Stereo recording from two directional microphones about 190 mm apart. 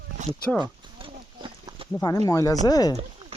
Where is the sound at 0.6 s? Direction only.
25° right (ahead or behind).